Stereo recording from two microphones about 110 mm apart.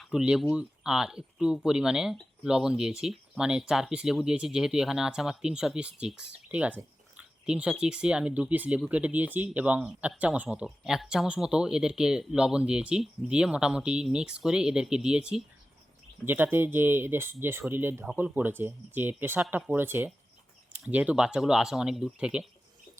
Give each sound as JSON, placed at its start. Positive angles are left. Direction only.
{"t": 0.0, "sound": "speech", "side_deg": -5}
{"t": 16.2, "sound": "speech", "side_deg": -20}